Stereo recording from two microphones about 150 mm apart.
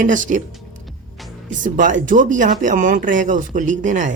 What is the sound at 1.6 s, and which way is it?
Speech, 60° right (ahead or behind).